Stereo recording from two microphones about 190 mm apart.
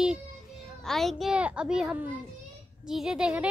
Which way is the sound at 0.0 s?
Centre (ahead or behind).